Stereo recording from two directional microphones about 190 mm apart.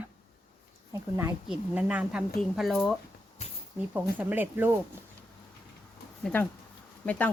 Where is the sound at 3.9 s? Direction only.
10° right (ahead or behind).